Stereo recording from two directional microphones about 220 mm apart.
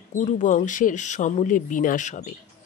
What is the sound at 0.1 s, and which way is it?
Speech, 35° left (ahead or behind).